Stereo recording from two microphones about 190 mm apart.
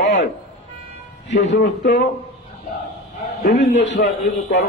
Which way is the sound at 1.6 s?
65° left (ahead or behind).